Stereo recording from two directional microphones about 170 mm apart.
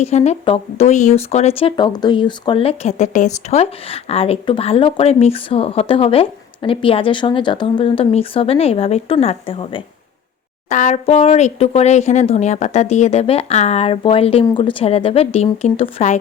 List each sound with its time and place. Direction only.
0.0 s speech: 40° left (ahead or behind)
10.7 s speech: 45° left (ahead or behind)